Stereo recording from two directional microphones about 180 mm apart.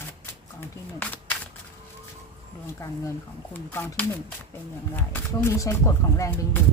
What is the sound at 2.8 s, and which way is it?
Speech, 15° left (ahead or behind).